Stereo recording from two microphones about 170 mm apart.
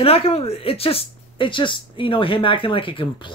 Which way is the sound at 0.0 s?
35° left (ahead or behind).